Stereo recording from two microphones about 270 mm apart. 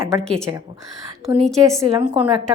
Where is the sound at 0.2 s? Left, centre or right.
Centre.